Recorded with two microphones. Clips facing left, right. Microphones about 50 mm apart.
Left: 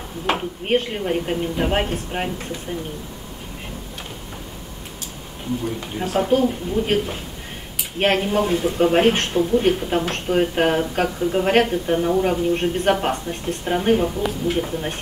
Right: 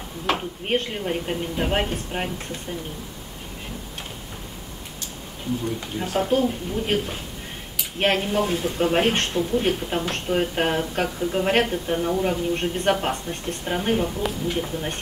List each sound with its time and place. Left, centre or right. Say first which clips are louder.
0.3 s speech: left 3 dB; centre
6.1 s speech: left 3 dB; centre